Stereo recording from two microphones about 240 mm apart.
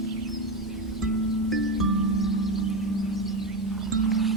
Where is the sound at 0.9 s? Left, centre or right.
Centre.